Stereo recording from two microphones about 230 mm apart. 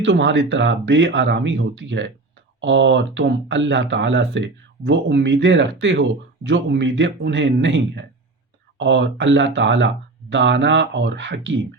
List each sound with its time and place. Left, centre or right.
0.0 s speech: right